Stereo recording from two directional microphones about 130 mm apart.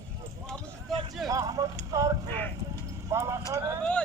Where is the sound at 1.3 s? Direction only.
25° right (ahead or behind).